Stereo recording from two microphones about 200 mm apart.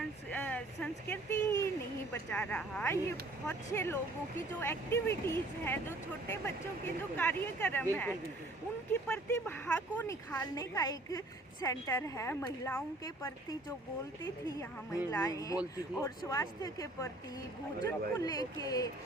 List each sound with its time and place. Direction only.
0.3 s a sound: 5° left (ahead or behind)
2.3 s a woman's voice: 5° left (ahead or behind)
8.9 s a woman's voice: 10° left (ahead or behind)